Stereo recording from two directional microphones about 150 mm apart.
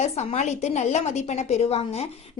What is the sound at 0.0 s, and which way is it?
A woman's voice, 50° left (ahead or behind).